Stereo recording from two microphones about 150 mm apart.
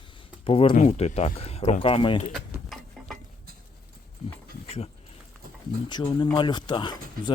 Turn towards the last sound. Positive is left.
turn(degrees=30)  # may be behind; listen again after turning